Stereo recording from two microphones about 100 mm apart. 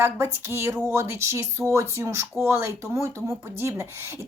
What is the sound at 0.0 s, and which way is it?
Speech, 25° right (ahead or behind).